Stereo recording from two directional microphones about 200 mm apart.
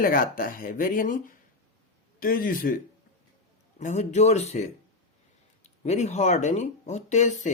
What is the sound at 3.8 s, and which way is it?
Speech, 35° left (ahead or behind).